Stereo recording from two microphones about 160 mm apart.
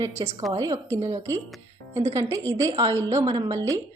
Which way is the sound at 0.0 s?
20° right (ahead or behind).